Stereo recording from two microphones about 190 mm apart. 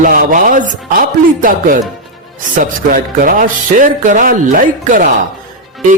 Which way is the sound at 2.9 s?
45° right (ahead or behind).